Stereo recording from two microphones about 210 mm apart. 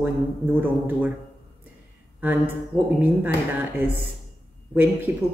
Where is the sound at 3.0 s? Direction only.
10° right (ahead or behind).